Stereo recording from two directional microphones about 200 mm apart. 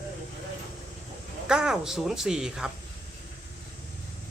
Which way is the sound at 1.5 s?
5° right (ahead or behind).